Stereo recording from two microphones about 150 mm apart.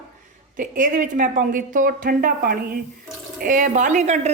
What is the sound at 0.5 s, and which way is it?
Speech, 65° right (ahead or behind).